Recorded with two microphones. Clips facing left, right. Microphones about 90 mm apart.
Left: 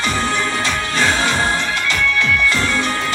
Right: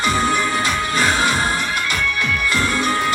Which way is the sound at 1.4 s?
25° left (ahead or behind).